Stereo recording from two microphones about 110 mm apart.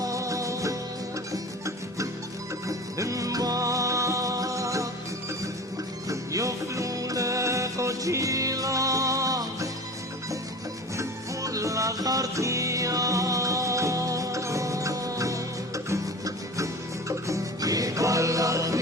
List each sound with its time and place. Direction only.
0.0 s music: 30° right (ahead or behind)
6.1 s music: 30° right (ahead or behind)
11.4 s music: 30° right (ahead or behind)